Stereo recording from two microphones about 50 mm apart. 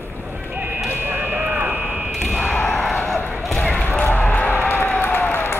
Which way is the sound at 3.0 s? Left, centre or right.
Centre.